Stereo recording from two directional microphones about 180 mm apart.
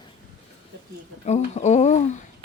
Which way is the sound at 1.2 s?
40° left (ahead or behind).